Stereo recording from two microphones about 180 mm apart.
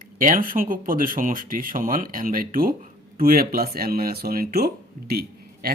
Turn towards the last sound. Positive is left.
turn(degrees=-60)  # may be behind; listen again after turning